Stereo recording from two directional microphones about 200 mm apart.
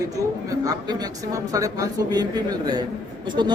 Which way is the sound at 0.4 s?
20° right (ahead or behind).